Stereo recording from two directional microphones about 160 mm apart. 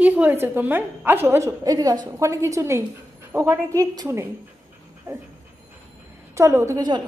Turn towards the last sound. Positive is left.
turn(degrees=-25)  # may be behind; listen again after turning